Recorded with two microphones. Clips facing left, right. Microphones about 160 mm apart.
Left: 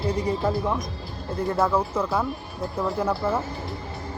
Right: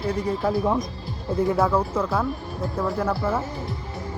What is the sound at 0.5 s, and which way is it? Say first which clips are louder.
Speech: right 3 dB; 15° right (ahead or behind).